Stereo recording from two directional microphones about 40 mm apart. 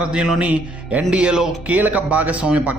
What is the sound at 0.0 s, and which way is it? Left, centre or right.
Speech, right.